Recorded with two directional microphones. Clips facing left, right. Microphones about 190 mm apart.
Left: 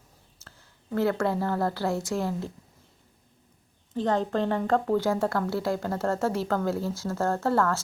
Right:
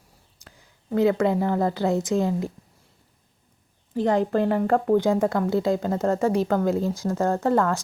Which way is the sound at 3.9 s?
10° right (ahead or behind).